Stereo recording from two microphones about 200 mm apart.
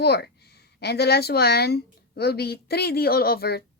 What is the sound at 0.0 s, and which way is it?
A woman's voice, 55° left (ahead or behind).